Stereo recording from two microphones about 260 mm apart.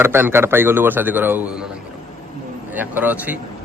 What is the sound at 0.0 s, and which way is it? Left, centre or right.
A man's voice, centre.